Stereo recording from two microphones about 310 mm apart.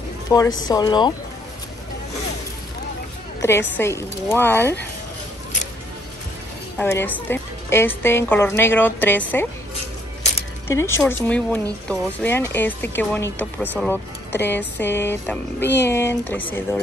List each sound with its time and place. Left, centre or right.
0.3 s speech: centre
3.3 s speech: centre
6.8 s speech: centre
10.7 s speech: centre